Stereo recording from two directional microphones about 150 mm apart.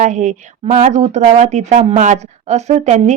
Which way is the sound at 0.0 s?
50° right (ahead or behind).